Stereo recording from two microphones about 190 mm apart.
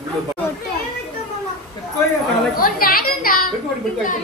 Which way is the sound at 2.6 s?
50° left (ahead or behind).